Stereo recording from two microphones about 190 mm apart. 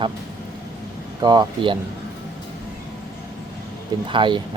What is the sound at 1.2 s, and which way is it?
Speech, 20° right (ahead or behind).